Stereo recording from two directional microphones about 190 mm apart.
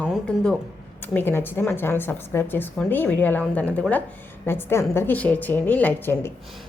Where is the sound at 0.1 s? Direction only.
5° left (ahead or behind).